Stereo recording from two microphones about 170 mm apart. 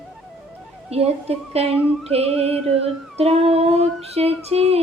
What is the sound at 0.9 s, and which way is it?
Female singing, 35° right (ahead or behind).